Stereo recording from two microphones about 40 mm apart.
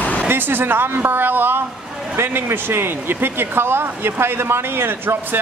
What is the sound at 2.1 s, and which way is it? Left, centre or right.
Speech, right.